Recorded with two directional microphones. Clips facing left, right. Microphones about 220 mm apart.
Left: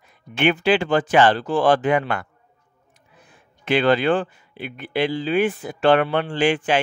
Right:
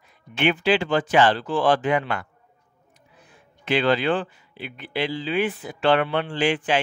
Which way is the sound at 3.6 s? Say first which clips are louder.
Left 3 dB; 50° left (ahead or behind).